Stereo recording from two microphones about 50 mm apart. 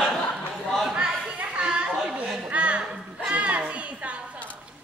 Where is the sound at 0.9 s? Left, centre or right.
Centre.